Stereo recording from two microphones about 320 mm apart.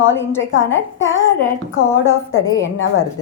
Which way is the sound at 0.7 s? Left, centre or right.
Left.